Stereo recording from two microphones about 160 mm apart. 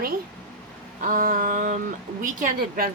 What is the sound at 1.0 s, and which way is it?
Mantra, 55° right (ahead or behind).